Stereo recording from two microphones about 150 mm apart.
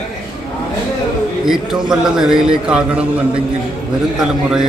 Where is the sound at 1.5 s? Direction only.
5° right (ahead or behind).